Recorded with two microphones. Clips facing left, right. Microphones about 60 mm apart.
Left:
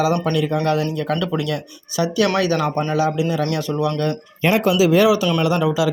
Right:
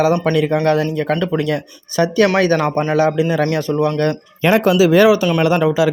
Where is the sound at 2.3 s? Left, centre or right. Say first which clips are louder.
Right 4 dB; right.